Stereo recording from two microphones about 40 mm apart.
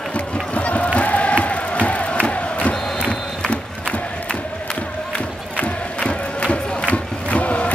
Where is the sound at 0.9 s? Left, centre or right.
Left.